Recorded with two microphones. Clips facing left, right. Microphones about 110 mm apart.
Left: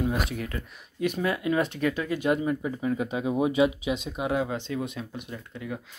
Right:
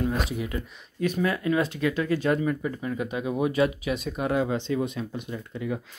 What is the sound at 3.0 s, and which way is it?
Speech, 25° left (ahead or behind).